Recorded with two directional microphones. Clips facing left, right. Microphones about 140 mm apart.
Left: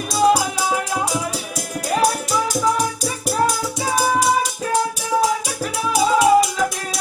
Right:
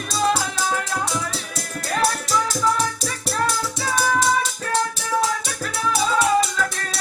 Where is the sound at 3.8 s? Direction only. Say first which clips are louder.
Left 3 dB; 25° left (ahead or behind).